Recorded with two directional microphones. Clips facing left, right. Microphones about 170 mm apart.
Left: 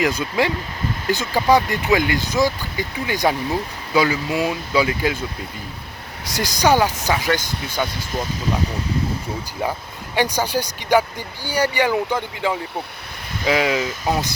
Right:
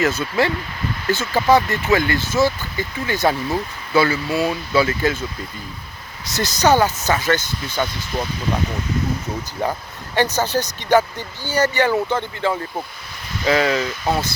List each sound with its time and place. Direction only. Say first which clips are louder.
0.0 s speech: right 1 dB; 15° left (ahead or behind)
6.2 s speech: right 1 dB; 10° left (ahead or behind)
10.2 s speech: right 1 dB; 10° left (ahead or behind)